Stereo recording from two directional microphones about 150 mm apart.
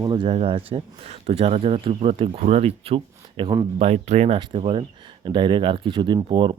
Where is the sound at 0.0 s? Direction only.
30° right (ahead or behind).